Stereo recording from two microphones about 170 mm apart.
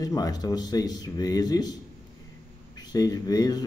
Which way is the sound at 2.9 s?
20° left (ahead or behind).